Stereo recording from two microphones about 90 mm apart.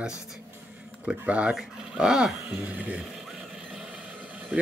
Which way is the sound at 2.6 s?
15° right (ahead or behind).